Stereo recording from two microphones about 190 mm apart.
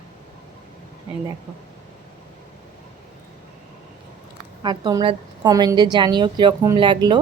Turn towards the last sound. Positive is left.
turn(degrees=-25)  # may be behind; listen again after turning